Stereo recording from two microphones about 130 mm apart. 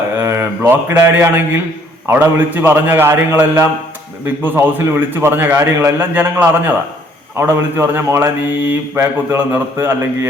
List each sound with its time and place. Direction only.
0.2 s a man's voice: 15° right (ahead or behind)